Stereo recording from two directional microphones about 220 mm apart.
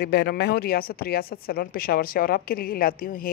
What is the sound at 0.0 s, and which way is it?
Speech, 45° left (ahead or behind).